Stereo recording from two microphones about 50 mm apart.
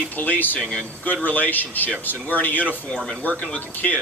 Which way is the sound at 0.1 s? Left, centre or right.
Left.